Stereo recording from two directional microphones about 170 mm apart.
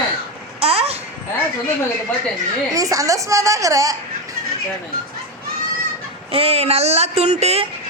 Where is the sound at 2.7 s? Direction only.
20° right (ahead or behind).